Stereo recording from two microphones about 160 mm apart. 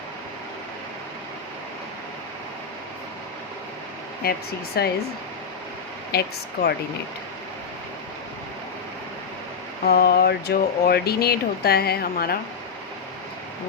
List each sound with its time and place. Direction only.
4.2 s speech: 75° left (ahead or behind)
6.1 s speech: 80° left
9.8 s speech: 70° left (ahead or behind)